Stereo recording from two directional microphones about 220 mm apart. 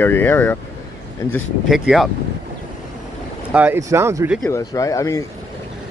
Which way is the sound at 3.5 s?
10° right (ahead or behind).